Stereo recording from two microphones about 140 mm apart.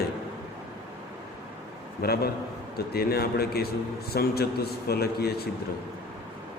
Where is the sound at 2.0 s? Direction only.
90° left.